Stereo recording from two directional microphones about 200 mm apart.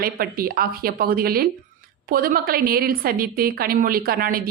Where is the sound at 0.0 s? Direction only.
45° right (ahead or behind).